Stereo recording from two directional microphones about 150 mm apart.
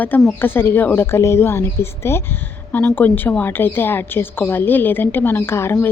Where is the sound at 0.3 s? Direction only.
15° left (ahead or behind).